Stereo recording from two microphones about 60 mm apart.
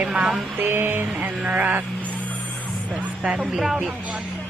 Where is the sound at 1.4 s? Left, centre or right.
Right.